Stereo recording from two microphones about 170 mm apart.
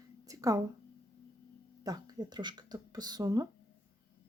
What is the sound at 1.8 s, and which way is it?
Speech, 20° right (ahead or behind).